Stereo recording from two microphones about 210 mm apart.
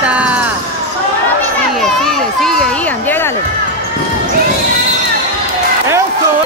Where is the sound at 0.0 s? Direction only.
5° right (ahead or behind).